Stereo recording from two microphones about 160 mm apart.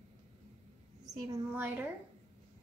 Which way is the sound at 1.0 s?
20° right (ahead or behind).